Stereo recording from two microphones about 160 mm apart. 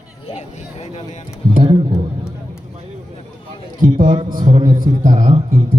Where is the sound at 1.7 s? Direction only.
35° right (ahead or behind).